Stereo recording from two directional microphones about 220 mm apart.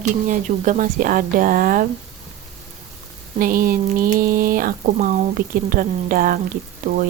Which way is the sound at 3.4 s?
40° right (ahead or behind).